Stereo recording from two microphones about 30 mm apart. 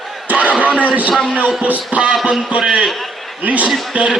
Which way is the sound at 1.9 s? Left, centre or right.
Right.